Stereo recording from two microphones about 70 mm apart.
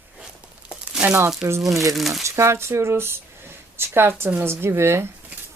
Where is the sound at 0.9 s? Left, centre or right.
Centre.